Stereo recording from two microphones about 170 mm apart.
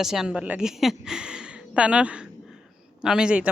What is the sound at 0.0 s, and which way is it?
A woman's voice, 5° right (ahead or behind).